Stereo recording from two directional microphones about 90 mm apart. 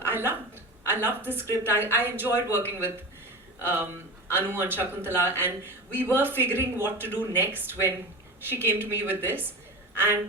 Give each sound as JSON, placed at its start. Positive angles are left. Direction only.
{"t": 0.0, "sound": "a woman's voice", "side_deg": -25}
{"t": 4.4, "sound": "a woman's voice", "side_deg": -25}